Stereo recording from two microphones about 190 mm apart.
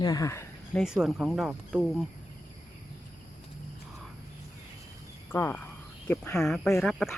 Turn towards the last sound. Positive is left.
turn(degrees=0)  # may be behind; listen again after turning